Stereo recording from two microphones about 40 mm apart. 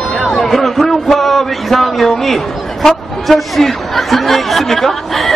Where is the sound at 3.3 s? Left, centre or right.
Centre.